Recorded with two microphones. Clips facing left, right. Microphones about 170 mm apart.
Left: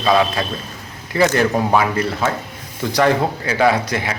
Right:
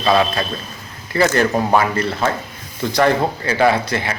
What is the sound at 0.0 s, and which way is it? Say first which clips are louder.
Speech: even; 10° left (ahead or behind).